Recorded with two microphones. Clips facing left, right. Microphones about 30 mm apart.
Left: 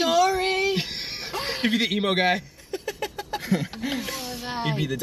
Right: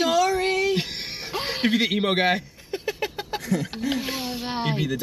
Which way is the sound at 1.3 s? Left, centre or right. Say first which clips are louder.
Right 2 dB; centre.